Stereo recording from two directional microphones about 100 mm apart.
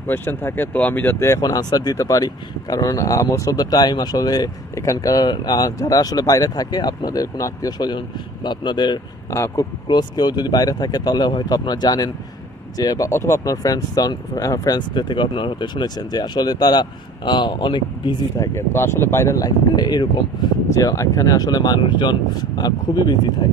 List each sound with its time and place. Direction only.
0.0 s speech: 20° left (ahead or behind)
1.4 s speech: 40° left (ahead or behind)
9.3 s speech: 30° left (ahead or behind)
9.8 s speech: 45° left (ahead or behind)
13.1 s speech: 25° left (ahead or behind)
14.8 s speech: 50° left (ahead or behind)
18.4 s speech: 25° left (ahead or behind); by 20.4 s 45° left (ahead or behind)
20.7 s speech: 30° left (ahead or behind)